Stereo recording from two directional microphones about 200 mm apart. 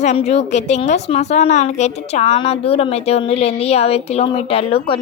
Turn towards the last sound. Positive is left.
turn(degrees=25)  # may be behind; listen again after turning